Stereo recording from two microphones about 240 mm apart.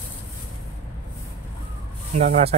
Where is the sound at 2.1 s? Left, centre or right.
Right.